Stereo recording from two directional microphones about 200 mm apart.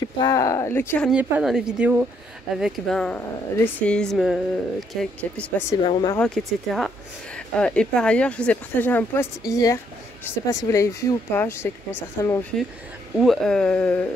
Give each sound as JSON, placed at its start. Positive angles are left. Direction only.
{"t": 0.0, "sound": "speech", "side_deg": 20}
{"t": 1.1, "sound": "speech", "side_deg": -5}
{"t": 5.9, "sound": "speech", "side_deg": 25}
{"t": 6.1, "sound": "speech", "side_deg": 5}